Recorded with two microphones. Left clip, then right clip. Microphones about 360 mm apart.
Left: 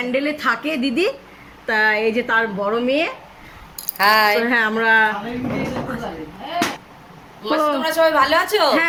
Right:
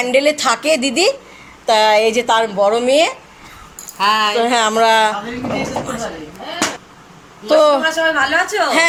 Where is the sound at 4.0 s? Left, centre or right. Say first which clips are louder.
Even; centre.